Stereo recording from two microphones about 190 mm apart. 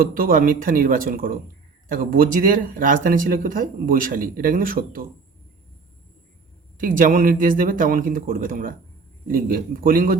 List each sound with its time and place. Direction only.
0.0 s speech: 50° right (ahead or behind)
6.7 s speech: 45° right (ahead or behind)